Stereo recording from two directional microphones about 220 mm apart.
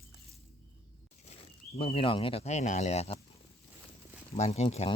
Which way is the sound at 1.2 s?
30° left (ahead or behind).